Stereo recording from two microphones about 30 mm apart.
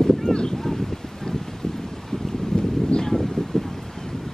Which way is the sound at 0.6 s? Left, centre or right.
Centre.